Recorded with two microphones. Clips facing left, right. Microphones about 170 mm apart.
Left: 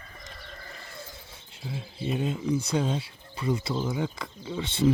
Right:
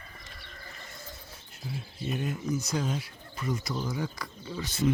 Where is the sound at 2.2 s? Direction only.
30° left (ahead or behind).